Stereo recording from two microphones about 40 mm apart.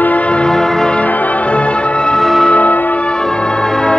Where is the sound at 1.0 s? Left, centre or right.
Left.